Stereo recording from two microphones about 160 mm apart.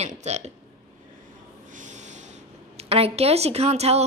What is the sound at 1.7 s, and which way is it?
Speech, 50° right (ahead or behind).